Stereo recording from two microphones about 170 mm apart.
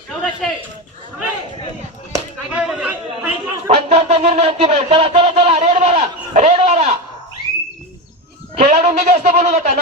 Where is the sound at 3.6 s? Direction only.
35° right (ahead or behind).